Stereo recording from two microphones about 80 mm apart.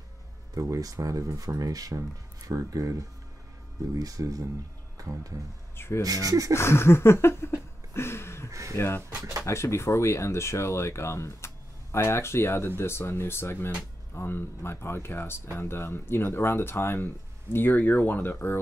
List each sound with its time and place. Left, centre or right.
0.6 s speech: right
5.8 s speech: left
6.0 s speech: right
6.5 s a sound: left
8.5 s a sound: right
8.7 s speech: left